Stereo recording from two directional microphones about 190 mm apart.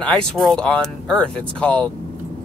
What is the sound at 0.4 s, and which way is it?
Speech, 5° left (ahead or behind).